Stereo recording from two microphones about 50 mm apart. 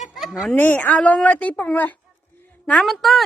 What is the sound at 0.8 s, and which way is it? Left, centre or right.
Speech, left.